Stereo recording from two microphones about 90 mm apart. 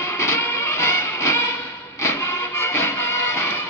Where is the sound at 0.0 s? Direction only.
30° left (ahead or behind).